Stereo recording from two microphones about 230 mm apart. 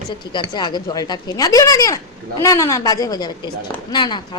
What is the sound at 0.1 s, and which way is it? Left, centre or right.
A woman's voice, centre.